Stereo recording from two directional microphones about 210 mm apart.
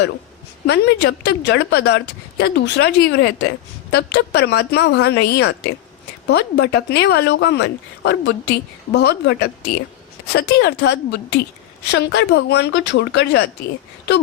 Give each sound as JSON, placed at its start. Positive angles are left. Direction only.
{"t": 0.7, "sound": "speech", "side_deg": 55}